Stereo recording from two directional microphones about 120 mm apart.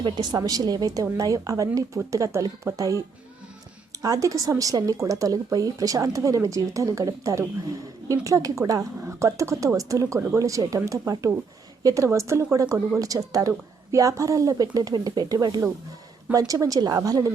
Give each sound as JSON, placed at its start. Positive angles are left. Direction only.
{"t": 0.0, "sound": "a woman's voice", "side_deg": -35}
{"t": 4.0, "sound": "a woman's voice", "side_deg": -30}